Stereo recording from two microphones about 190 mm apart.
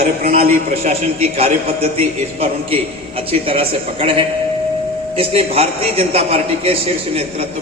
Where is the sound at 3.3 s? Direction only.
30° right (ahead or behind).